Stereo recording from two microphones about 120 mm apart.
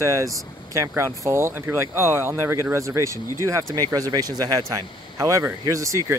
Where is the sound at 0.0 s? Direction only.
25° right (ahead or behind).